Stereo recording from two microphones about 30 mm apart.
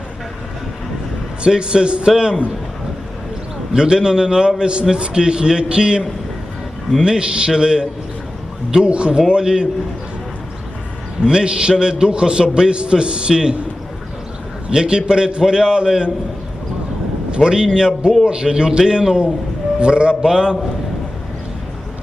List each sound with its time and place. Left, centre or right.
1.5 s a man's voice: right
3.7 s a man's voice: right
7.0 s a man's voice: right
9.2 s a man's voice: right
11.3 s a man's voice: right
14.7 s a man's voice: right
17.3 s a man's voice: right